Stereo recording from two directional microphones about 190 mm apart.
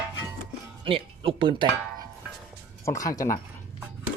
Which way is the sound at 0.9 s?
30° right (ahead or behind).